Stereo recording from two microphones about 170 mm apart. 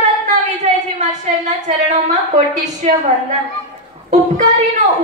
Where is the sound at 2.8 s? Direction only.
40° right (ahead or behind).